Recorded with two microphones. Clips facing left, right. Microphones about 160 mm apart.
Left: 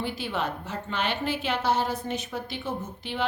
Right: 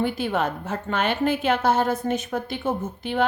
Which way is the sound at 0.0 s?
50° right (ahead or behind).